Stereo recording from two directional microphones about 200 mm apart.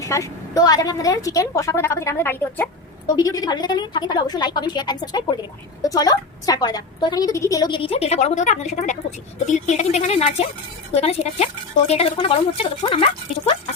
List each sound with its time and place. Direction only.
0.0 s a woman's voice: 15° left (ahead or behind)